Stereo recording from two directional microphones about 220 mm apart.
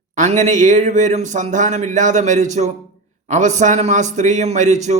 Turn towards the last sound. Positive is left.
turn(degrees=-35)  # may be behind; listen again after turning